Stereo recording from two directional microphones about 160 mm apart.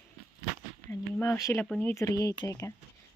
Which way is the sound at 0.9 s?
15° left (ahead or behind).